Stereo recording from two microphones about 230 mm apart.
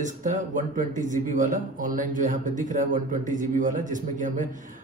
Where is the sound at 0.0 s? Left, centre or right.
Right.